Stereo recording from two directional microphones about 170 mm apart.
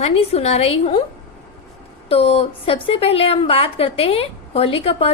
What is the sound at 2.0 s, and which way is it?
A woman's voice, 35° left (ahead or behind).